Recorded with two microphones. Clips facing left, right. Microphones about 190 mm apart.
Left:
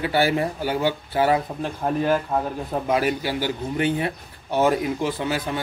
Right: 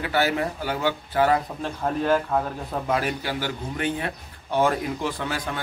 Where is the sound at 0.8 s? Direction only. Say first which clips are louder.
Even; 25° left (ahead or behind).